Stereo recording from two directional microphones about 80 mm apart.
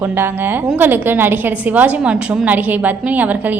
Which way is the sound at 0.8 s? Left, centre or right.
Right.